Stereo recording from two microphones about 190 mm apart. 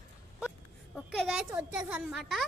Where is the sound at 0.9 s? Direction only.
Centre (ahead or behind).